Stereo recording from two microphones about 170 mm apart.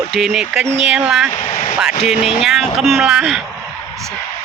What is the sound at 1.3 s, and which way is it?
Speech, 40° left (ahead or behind).